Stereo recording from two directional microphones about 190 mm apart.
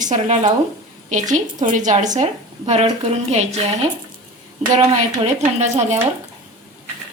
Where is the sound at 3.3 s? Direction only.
35° right (ahead or behind).